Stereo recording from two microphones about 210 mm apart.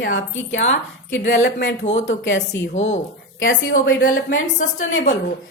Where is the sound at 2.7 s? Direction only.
35° left (ahead or behind).